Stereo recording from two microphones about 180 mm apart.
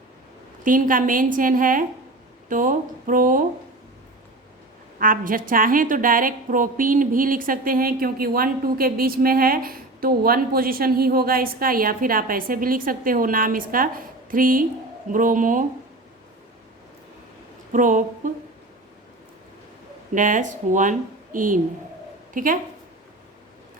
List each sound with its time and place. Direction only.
0.6 s a woman's voice: 50° right (ahead or behind)
4.9 s a woman's voice: 50° right (ahead or behind)
17.7 s a woman's voice: 45° right (ahead or behind)
20.1 s a woman's voice: 45° right (ahead or behind)